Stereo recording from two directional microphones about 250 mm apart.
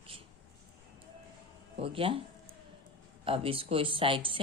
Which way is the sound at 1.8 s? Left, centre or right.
Right.